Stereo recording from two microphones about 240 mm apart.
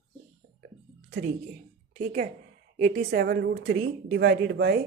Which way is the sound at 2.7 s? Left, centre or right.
Right.